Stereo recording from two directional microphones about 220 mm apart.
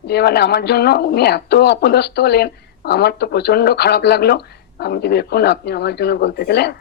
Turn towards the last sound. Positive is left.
turn(degrees=50)  # may be behind; listen again after turning